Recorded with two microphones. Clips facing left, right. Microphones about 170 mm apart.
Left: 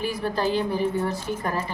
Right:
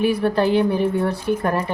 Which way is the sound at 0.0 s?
65° right (ahead or behind).